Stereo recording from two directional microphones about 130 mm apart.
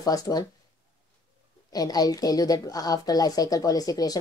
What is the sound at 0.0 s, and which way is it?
Speech, 30° left (ahead or behind).